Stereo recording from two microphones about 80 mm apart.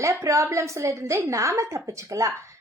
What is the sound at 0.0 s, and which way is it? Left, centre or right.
A woman's voice, right.